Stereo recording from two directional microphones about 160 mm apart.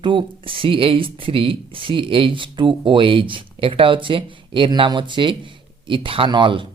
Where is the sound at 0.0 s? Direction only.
30° right (ahead or behind).